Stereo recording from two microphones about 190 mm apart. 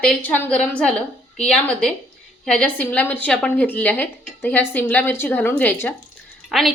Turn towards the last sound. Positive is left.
turn(degrees=0)  # may be behind; listen again after turning